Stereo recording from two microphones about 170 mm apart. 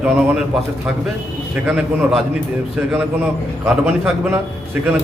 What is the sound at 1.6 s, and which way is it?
Speech, 5° right (ahead or behind).